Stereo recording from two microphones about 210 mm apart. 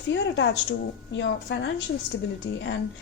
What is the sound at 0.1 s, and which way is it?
A woman's voice, 60° left (ahead or behind).